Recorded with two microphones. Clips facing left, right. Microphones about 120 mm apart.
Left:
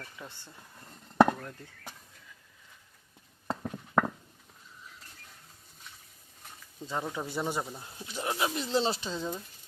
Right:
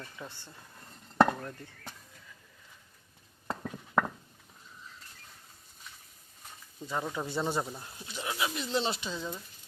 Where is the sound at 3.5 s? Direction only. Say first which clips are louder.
Left 2 dB; 5° left (ahead or behind).